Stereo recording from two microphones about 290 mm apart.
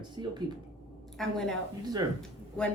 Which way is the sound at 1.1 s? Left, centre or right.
Centre.